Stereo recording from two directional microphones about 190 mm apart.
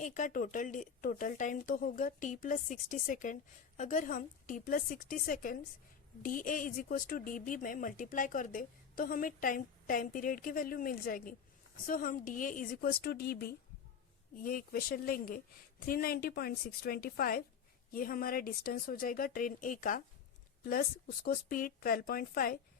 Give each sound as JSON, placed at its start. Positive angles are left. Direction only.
{"t": 0.0, "sound": "speech", "side_deg": 40}